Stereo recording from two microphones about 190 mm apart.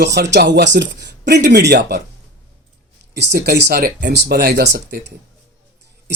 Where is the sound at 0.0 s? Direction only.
60° right (ahead or behind).